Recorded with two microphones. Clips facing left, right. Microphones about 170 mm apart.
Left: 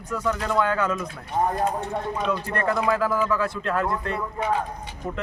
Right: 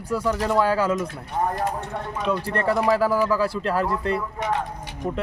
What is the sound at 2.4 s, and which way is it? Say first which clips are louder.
Speech: right 4 dB; 35° right (ahead or behind).